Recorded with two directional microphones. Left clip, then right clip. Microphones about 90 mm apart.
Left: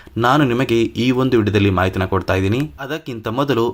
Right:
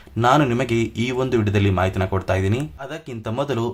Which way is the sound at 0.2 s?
35° left (ahead or behind).